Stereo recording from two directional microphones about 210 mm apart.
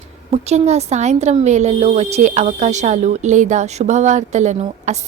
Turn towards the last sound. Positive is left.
turn(degrees=-35)  # may be behind; listen again after turning